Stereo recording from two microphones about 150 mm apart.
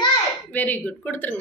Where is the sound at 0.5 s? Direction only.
10° left (ahead or behind).